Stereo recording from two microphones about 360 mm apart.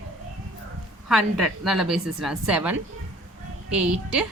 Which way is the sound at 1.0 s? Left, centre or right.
Centre.